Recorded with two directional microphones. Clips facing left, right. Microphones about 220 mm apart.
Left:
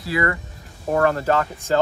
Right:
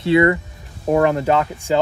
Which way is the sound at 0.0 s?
25° right (ahead or behind).